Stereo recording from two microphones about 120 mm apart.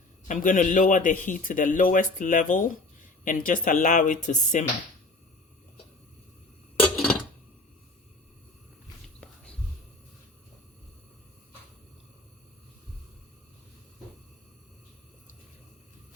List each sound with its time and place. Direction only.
0.3 s speech: 90° left
6.7 s a sound: centre (ahead or behind)
9.2 s whispering: 10° left (ahead or behind)